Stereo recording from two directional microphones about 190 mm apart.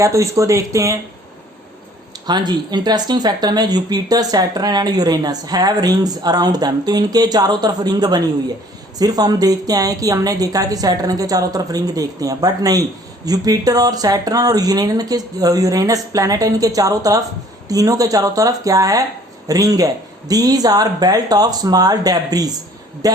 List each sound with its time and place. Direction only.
0.0 s speech: 15° right (ahead or behind)
2.2 s speech: 20° right (ahead or behind)